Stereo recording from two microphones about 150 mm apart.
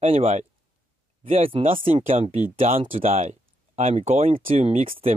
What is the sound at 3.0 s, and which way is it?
Speech, 60° right (ahead or behind).